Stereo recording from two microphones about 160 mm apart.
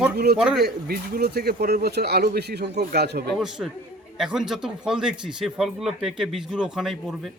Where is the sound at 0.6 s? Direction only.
70° right (ahead or behind); by 3.3 s 90° right.